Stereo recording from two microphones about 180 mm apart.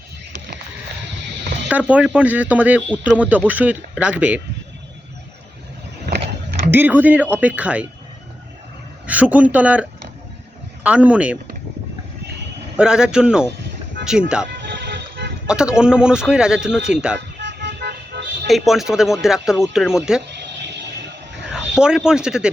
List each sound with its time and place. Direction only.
1.7 s speech: 5° right (ahead or behind)
6.7 s speech: 10° right (ahead or behind)
9.0 s speech: 5° right (ahead or behind)
10.8 s speech: 5° right (ahead or behind)
12.7 s a man's voice: 5° right (ahead or behind)
14.8 s music: 70° right (ahead or behind)
15.4 s a man's voice: 5° right (ahead or behind)
17.2 s vehicle: 75° right (ahead or behind)
18.4 s a man's voice: centre (ahead or behind)
20.3 s a sound: 75° right (ahead or behind)
21.5 s speech: 5° right (ahead or behind)